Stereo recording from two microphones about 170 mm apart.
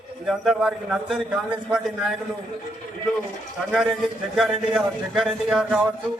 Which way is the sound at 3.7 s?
Centre (ahead or behind).